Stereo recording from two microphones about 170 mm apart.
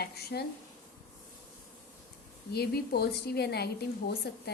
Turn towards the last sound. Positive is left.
turn(degrees=70)  # may be behind; listen again after turning